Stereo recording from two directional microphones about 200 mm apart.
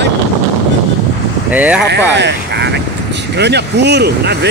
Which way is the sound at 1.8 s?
60° right (ahead or behind).